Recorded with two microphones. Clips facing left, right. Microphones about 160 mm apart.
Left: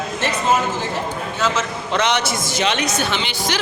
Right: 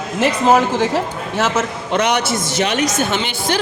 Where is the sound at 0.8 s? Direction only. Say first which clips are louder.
Right 5 dB; 90° right.